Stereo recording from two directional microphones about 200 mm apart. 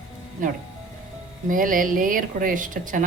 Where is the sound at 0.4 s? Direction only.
40° right (ahead or behind).